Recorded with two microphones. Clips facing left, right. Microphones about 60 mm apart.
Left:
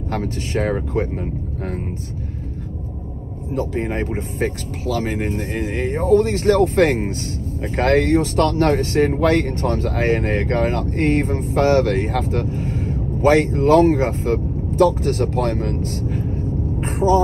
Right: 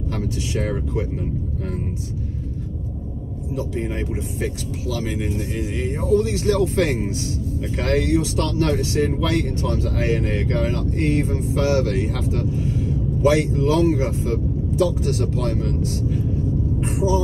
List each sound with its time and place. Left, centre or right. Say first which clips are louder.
0.1 s speech: left 4 dB; left
3.5 s speech: left 4 dB; left